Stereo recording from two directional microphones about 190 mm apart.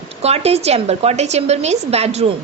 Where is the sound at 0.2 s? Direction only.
35° right (ahead or behind).